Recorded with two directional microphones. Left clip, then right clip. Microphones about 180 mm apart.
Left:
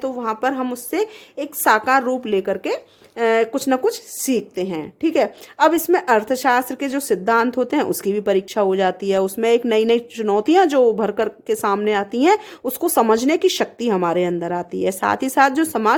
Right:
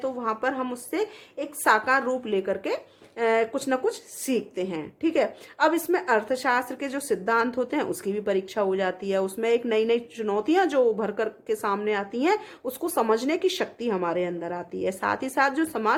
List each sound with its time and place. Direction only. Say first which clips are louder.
0.0 s a woman's voice: left 5 dB; 55° left (ahead or behind)